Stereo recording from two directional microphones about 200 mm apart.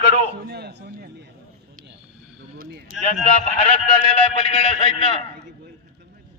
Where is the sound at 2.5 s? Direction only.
45° right (ahead or behind).